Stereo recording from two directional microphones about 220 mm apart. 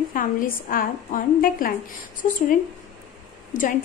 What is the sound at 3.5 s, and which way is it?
Speech, 35° left (ahead or behind).